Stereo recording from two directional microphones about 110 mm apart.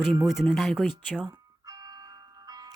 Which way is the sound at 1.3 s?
35° right (ahead or behind).